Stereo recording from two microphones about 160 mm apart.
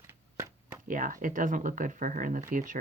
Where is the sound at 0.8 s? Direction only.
55° right (ahead or behind).